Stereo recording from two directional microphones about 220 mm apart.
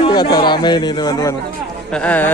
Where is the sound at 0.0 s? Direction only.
20° left (ahead or behind).